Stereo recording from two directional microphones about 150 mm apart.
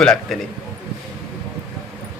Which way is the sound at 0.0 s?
5° left (ahead or behind).